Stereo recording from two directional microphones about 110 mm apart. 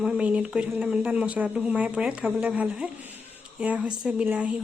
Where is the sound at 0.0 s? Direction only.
10° right (ahead or behind).